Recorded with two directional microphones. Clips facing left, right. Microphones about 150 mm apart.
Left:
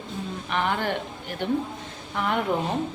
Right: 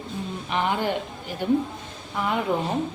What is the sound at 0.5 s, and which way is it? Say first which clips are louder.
Speech: right 1 dB; 15° right (ahead or behind).